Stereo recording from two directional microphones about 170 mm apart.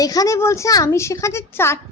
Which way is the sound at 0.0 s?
20° left (ahead or behind).